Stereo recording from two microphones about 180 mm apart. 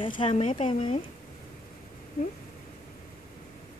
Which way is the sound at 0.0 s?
30° left (ahead or behind).